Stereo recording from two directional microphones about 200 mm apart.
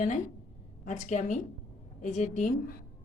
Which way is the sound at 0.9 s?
35° left (ahead or behind).